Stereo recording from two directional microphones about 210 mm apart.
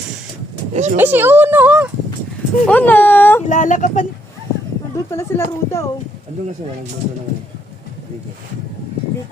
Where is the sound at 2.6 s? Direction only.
10° left (ahead or behind).